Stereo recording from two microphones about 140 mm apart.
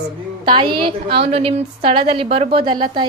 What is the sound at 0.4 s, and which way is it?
A woman's voice, 35° right (ahead or behind).